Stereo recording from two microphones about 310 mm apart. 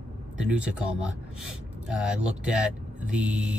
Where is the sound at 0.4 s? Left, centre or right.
Centre.